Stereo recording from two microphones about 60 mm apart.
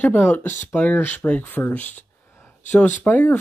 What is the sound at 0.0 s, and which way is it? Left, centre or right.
Speech, left.